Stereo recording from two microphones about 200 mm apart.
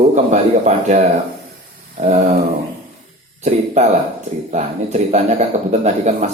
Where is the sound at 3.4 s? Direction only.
35° right (ahead or behind).